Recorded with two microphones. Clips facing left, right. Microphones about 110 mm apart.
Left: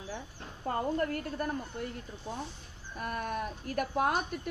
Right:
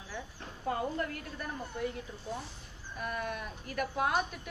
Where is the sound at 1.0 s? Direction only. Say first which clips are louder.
Left 7 dB; 45° left (ahead or behind).